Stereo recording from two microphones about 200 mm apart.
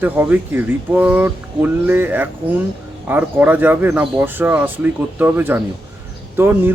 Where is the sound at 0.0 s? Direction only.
10° right (ahead or behind).